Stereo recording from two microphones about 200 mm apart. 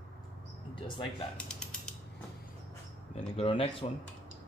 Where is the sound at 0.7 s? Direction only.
25° left (ahead or behind).